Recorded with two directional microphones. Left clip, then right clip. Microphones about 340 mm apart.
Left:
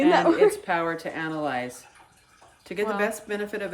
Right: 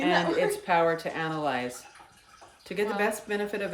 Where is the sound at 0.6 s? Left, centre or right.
Centre.